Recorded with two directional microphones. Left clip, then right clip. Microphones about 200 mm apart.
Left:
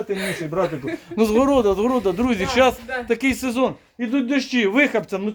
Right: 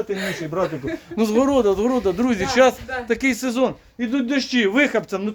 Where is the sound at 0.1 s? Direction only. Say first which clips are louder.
Even; 10° right (ahead or behind).